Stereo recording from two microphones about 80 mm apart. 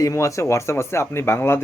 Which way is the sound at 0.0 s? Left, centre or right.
Left.